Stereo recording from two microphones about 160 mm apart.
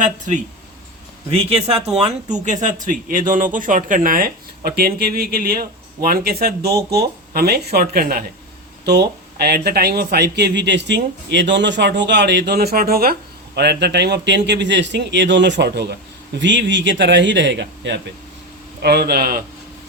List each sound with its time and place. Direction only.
0.0 s speech: 50° right (ahead or behind)
1.3 s a man's voice: 40° right (ahead or behind); by 8.2 s 70° right (ahead or behind)
8.8 s a man's voice: 90° right; by 13.1 s 70° right (ahead or behind)
13.6 s a man's voice: 90° right; by 19.4 s 75° right (ahead or behind)